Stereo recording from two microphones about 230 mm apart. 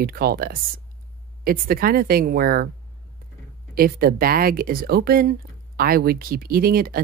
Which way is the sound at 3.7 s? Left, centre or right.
Right.